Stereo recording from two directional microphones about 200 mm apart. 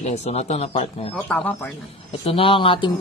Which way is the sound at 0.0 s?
35° left (ahead or behind).